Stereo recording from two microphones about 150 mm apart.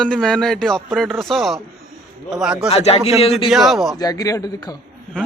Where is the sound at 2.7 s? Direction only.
45° left (ahead or behind).